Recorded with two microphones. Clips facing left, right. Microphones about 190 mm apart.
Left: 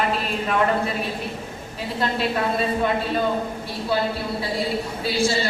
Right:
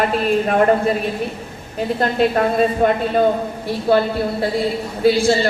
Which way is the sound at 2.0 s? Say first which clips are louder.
Right 6 dB; 50° right (ahead or behind).